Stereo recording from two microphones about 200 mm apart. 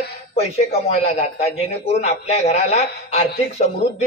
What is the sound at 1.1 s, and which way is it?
A man's voice, 30° left (ahead or behind).